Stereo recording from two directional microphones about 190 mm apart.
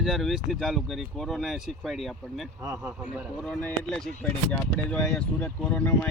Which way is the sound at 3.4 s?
5° left (ahead or behind).